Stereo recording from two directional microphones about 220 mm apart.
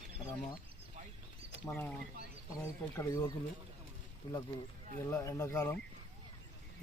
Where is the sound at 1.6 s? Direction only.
10° left (ahead or behind).